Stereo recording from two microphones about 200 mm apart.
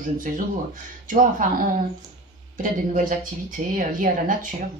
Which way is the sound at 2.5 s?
40° right (ahead or behind).